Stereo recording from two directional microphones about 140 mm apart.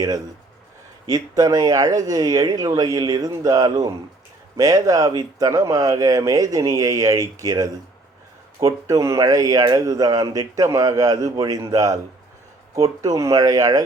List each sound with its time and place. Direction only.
1.0 s a man's voice: 25° right (ahead or behind)
13.0 s a man's voice: 25° right (ahead or behind)